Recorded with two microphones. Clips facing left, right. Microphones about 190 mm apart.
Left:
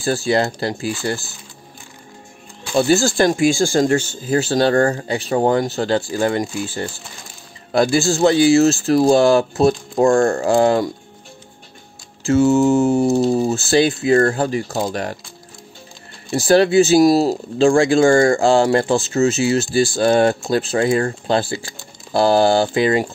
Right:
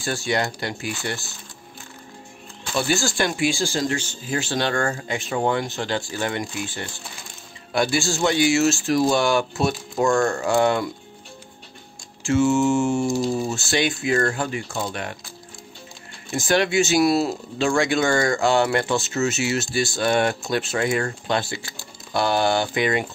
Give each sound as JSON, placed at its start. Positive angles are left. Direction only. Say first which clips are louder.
{"t": 0.0, "sound": "speech", "louder": "left 6 dB", "side_deg": 35}
{"t": 2.7, "sound": "speech", "louder": "left 8 dB", "side_deg": 35}
{"t": 12.2, "sound": "speech", "louder": "left 5 dB", "side_deg": 35}
{"t": 16.3, "sound": "speech", "louder": "left 7 dB", "side_deg": 35}